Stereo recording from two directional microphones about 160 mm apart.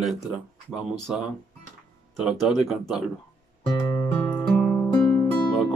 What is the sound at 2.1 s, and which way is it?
Music, centre (ahead or behind).